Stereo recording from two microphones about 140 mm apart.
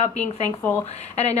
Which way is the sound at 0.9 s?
50° left (ahead or behind).